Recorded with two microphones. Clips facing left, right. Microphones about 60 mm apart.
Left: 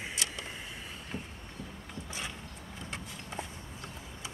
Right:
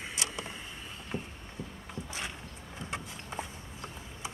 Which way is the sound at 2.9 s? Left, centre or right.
Centre.